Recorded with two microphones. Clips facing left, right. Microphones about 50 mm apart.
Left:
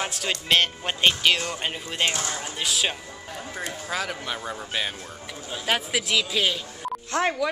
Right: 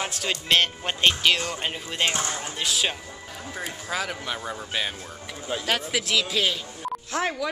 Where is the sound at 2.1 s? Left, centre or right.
Right.